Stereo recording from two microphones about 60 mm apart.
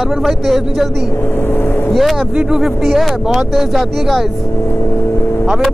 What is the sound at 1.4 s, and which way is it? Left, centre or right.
Vehicle, left.